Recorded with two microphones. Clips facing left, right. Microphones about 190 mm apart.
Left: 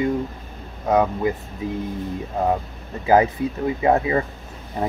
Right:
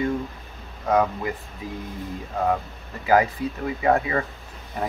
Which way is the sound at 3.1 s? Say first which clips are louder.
Left 3 dB; 25° left (ahead or behind).